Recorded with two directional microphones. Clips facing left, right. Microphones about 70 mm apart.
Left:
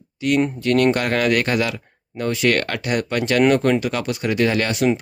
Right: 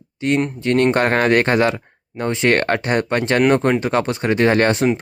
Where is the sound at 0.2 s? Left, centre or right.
Right.